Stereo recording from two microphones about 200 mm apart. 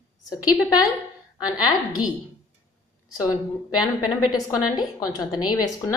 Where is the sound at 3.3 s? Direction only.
20° left (ahead or behind).